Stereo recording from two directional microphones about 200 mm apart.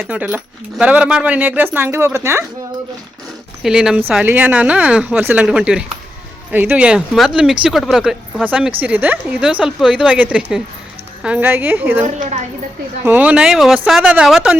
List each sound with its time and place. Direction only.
0.0 s speech: 10° right (ahead or behind)
3.6 s speech: 5° right (ahead or behind)
12.0 s speech: 35° right (ahead or behind)
13.1 s speech: 10° right (ahead or behind)